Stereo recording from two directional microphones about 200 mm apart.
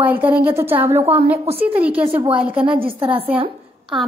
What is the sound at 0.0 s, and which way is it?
A woman's voice, 10° right (ahead or behind).